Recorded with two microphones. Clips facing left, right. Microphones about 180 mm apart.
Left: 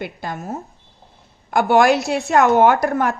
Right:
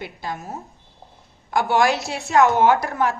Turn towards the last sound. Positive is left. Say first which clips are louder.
# left 2 dB
turn(degrees=50)  # may be behind; listen again after turning